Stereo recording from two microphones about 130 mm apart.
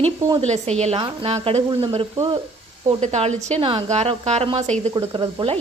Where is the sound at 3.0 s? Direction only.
60° right (ahead or behind).